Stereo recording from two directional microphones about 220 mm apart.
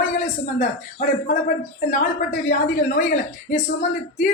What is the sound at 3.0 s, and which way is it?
Speech, 35° left (ahead or behind).